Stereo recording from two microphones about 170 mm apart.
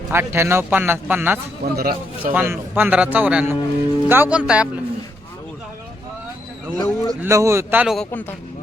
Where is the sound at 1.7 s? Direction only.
60° right (ahead or behind).